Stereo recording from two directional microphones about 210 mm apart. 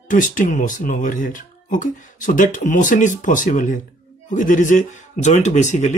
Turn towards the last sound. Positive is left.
turn(degrees=35)  # may be behind; listen again after turning